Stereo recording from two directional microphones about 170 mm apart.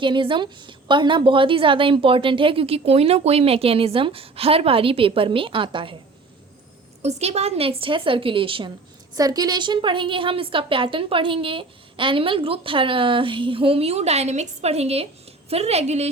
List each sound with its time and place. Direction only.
0.0 s a woman's voice: 30° right (ahead or behind)
7.0 s a woman's voice: 40° right (ahead or behind)